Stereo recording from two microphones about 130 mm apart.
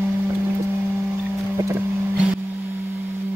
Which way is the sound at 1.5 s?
20° right (ahead or behind).